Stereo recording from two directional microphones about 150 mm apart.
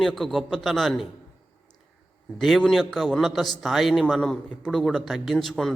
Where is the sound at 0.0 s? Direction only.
Centre (ahead or behind).